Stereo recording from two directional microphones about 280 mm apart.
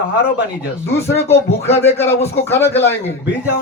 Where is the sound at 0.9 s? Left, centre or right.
Centre.